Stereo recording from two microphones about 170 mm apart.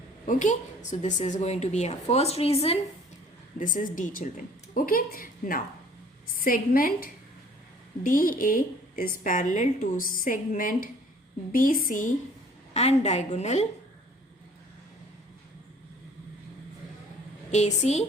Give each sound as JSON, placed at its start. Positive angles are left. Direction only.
{"t": 0.3, "sound": "a woman's voice", "side_deg": 50}
{"t": 3.6, "sound": "a woman's voice", "side_deg": 50}
{"t": 12.7, "sound": "a woman's voice", "side_deg": 40}
{"t": 17.5, "sound": "a woman's voice", "side_deg": 40}